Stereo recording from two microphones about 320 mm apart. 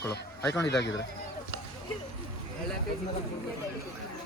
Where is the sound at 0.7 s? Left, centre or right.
Left.